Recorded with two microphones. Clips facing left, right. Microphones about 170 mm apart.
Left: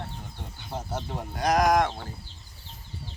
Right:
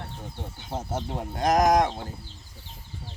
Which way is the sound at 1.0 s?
20° right (ahead or behind).